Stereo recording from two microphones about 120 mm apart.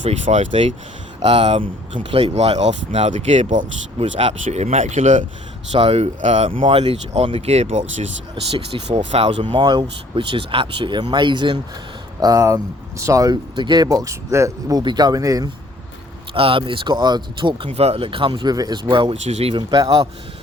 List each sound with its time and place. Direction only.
0.0 s speech: 80° right
1.2 s speech: 50° right (ahead or behind); by 5.2 s 80° right
5.7 s speech: 55° right (ahead or behind)
6.5 s speech: 50° right (ahead or behind); by 8.0 s 70° right (ahead or behind)
9.0 s speech: 50° right (ahead or behind)
12.2 s speech: 30° right (ahead or behind)
16.3 s speech: 50° right (ahead or behind)
19.0 s speech: 65° right (ahead or behind)
19.5 s speech: 40° right (ahead or behind)